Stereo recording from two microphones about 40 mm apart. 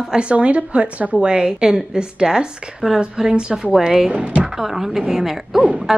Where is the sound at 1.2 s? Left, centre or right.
Right.